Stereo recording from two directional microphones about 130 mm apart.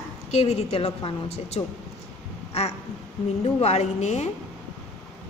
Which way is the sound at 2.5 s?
55° left (ahead or behind).